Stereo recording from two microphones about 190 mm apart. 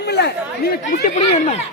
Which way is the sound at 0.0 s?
60° left (ahead or behind).